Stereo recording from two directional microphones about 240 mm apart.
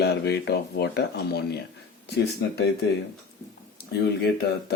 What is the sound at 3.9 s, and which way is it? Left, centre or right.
Speech, left.